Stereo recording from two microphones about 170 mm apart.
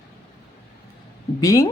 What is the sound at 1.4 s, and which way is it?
Speech, 20° left (ahead or behind).